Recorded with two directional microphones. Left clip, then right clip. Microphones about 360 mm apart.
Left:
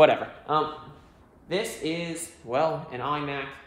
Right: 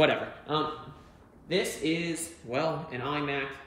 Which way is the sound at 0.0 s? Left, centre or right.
Centre.